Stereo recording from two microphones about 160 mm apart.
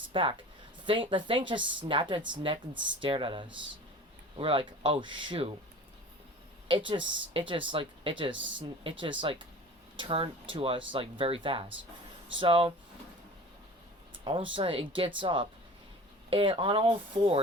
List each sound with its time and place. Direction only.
0.1 s speech: 35° right (ahead or behind)
6.7 s speech: 30° right (ahead or behind)
14.3 s speech: 35° right (ahead or behind)